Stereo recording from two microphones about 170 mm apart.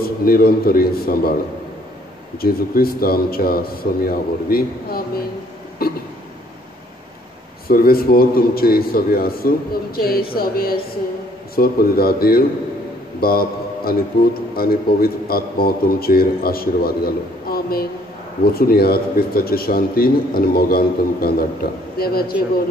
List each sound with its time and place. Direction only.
0.0 s a man's voice: 60° left (ahead or behind)
2.3 s a man's voice: 60° left (ahead or behind)
5.8 s a sound: 60° left (ahead or behind)
7.6 s a man's voice: 60° left (ahead or behind)